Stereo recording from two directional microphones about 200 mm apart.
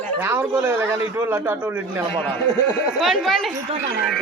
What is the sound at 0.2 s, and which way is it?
A man's voice, 10° right (ahead or behind).